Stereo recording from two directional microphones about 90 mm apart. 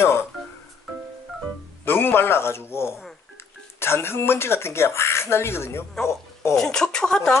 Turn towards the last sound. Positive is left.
turn(degrees=5)  # may be behind; listen again after turning